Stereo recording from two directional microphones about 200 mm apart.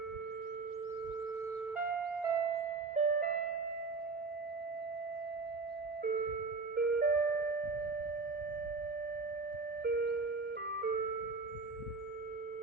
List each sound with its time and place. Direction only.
1.8 s music: 10° right (ahead or behind)
2.9 s music: 40° right (ahead or behind)
6.0 s music: 45° right (ahead or behind)
9.8 s music: 50° right (ahead or behind)